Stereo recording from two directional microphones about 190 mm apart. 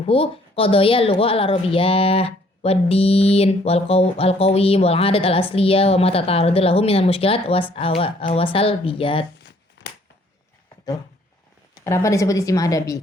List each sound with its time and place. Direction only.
0.0 s a woman's voice: 30° left (ahead or behind)
11.9 s a woman's voice: 15° left (ahead or behind)